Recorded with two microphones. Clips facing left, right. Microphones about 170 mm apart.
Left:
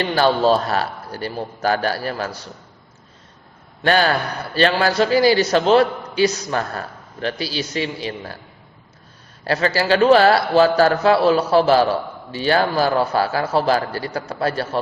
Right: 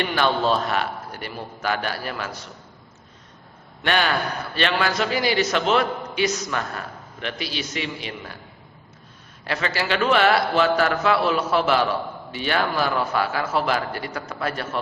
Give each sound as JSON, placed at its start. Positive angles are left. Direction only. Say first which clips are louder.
{"t": 0.0, "sound": "a man's voice", "louder": "left 5 dB", "side_deg": 35}
{"t": 3.8, "sound": "a man's voice", "louder": "left 5 dB", "side_deg": 35}
{"t": 9.4, "sound": "a man's voice", "louder": "left 6 dB", "side_deg": 35}